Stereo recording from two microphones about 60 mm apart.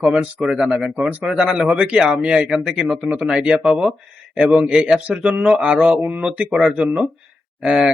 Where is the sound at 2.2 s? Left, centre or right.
Centre.